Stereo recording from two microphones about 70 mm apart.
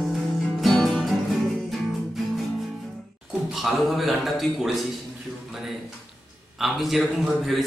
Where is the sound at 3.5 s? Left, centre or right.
Centre.